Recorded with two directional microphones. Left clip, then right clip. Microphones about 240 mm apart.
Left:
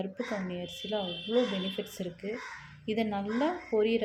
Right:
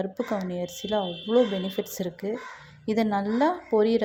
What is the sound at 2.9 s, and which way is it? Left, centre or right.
A woman's voice, right.